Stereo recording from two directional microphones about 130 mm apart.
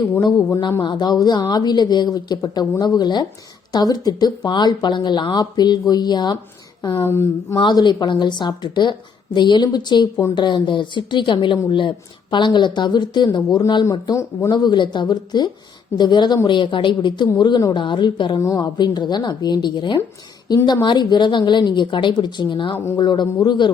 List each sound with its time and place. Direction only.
0.3 s speech: 20° left (ahead or behind)
0.8 s a woman's voice: 35° left (ahead or behind)
6.8 s speech: 20° left (ahead or behind)
7.5 s a woman's voice: 30° left (ahead or behind)